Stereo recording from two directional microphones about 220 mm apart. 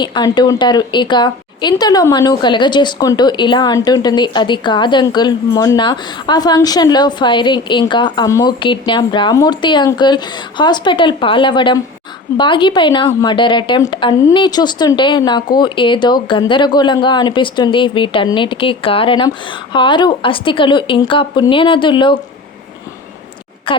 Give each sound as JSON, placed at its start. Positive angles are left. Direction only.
{"t": 0.0, "sound": "a woman's voice", "side_deg": 20}
{"t": 23.7, "sound": "a woman's voice", "side_deg": 20}